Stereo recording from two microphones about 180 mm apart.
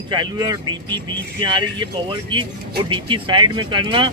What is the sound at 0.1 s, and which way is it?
Speech, 25° right (ahead or behind).